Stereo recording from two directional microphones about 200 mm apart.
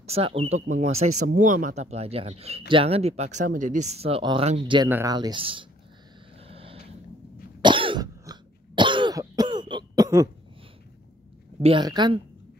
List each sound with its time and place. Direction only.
0.0 s speech: 30° right (ahead or behind)
4.8 s speech: 10° right (ahead or behind)
5.1 s a woman's voice: 25° right (ahead or behind)
6.4 s a sound: 30° right (ahead or behind)
7.6 s cough: 25° right (ahead or behind)
11.6 s a woman's voice: 25° right (ahead or behind)